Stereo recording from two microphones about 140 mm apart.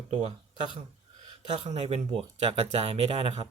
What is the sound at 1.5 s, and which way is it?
Speech, 50° right (ahead or behind).